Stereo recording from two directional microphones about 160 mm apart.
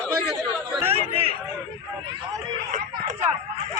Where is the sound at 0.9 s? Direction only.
40° right (ahead or behind).